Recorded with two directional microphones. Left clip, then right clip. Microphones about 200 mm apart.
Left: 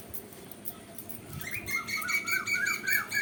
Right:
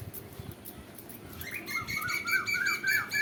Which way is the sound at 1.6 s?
20° left (ahead or behind).